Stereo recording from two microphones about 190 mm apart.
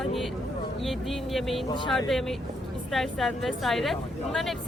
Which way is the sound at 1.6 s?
25° left (ahead or behind).